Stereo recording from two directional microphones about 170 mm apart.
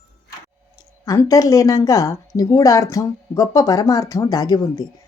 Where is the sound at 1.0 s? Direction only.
20° left (ahead or behind).